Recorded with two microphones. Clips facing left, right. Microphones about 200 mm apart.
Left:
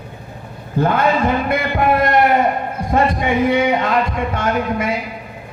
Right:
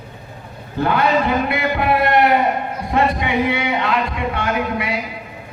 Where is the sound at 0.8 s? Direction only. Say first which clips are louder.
Left 1 dB; 45° left (ahead or behind).